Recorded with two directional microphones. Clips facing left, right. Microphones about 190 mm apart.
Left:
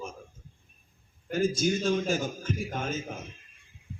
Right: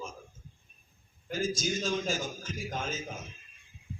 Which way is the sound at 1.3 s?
60° left (ahead or behind).